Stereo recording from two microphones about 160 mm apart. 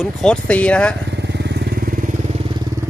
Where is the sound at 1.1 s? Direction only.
90° right; by 2.1 s 65° right (ahead or behind).